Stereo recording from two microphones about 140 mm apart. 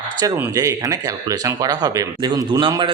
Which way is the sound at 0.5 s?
25° right (ahead or behind).